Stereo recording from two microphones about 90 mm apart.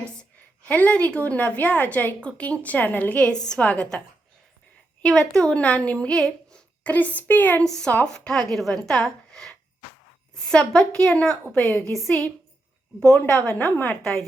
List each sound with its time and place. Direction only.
0.0 s a woman's voice: 15° left (ahead or behind)
5.0 s speech: 5° left (ahead or behind)
5.4 s a woman's voice: 15° left (ahead or behind)
11.9 s speech: 5° left (ahead or behind)
13.1 s a woman's voice: 15° left (ahead or behind)